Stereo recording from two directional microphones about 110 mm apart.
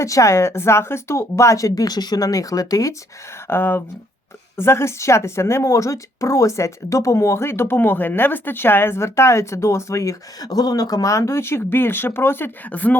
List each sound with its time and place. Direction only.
0.0 s speech: 30° left (ahead or behind)
3.4 s speech: 20° left (ahead or behind)